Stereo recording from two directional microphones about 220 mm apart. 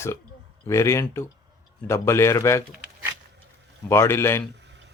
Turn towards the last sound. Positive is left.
turn(degrees=-50)  # may be behind; listen again after turning